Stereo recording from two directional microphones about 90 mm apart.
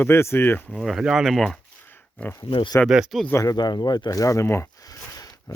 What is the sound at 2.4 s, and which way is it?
Speech, 60° left (ahead or behind).